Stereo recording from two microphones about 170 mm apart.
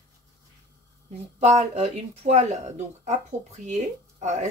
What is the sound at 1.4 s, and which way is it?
Speech, 40° right (ahead or behind).